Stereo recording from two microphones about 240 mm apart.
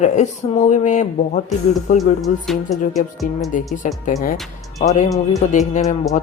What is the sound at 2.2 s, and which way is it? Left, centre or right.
Speech, centre.